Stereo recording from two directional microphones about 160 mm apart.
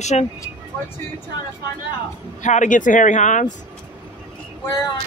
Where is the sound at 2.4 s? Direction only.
50° left (ahead or behind).